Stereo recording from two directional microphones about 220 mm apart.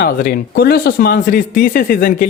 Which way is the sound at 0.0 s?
40° left (ahead or behind).